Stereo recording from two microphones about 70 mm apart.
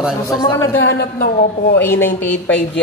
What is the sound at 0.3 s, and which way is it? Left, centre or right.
Speech, left.